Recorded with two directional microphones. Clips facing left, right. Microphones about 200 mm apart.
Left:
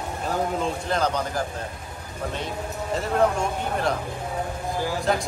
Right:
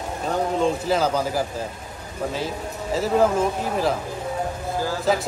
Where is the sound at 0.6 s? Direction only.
Centre (ahead or behind).